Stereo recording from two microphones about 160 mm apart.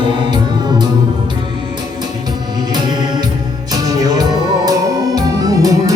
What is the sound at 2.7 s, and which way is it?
Music, 25° right (ahead or behind).